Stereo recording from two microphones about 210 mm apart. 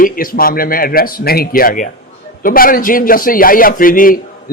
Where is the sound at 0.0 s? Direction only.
45° left (ahead or behind).